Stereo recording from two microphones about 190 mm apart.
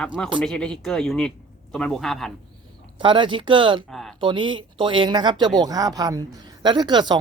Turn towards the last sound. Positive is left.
turn(degrees=-25)  # may be behind; listen again after turning